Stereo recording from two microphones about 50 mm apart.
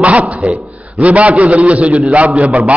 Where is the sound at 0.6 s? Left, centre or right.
Right.